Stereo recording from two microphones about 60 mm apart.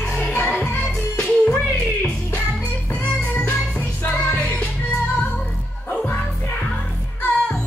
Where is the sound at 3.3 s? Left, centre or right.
Left.